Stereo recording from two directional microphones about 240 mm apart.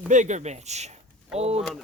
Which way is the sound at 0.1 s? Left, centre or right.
Right.